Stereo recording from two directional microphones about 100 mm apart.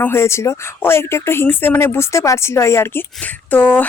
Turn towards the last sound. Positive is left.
turn(degrees=15)  # may be behind; listen again after turning